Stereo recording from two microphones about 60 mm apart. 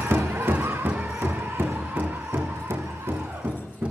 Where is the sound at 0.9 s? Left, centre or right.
Right.